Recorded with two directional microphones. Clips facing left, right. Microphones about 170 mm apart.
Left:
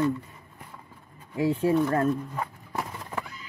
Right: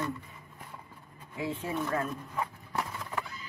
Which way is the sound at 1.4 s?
40° left (ahead or behind).